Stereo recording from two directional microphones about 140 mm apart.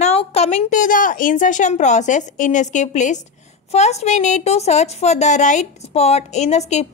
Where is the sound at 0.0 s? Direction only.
50° left (ahead or behind).